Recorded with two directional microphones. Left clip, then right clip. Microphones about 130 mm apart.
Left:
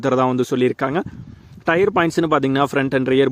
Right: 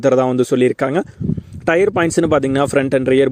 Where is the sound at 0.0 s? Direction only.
20° right (ahead or behind).